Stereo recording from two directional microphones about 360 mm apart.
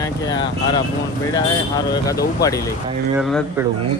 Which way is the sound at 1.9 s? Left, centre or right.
Centre.